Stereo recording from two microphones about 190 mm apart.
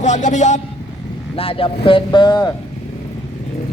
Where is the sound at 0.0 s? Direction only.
40° left (ahead or behind); by 2.5 s 25° left (ahead or behind).